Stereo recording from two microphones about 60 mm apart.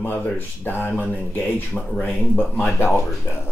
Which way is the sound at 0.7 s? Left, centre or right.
Left.